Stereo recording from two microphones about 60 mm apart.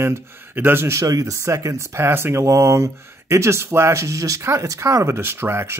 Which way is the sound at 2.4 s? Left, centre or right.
Right.